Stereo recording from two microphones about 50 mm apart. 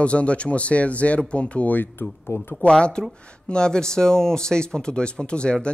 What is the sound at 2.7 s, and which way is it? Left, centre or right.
Speech, centre.